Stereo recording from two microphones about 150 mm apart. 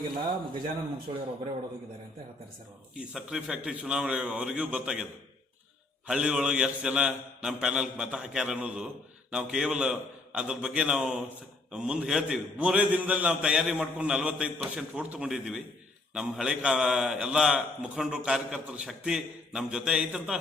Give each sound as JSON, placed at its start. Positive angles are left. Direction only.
{"t": 1.1, "sound": "a man's voice", "side_deg": -40}
{"t": 2.9, "sound": "a man's voice", "side_deg": -5}
{"t": 6.1, "sound": "a man's voice", "side_deg": -5}